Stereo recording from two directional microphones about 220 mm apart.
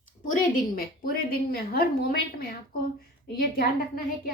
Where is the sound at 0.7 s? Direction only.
45° left (ahead or behind).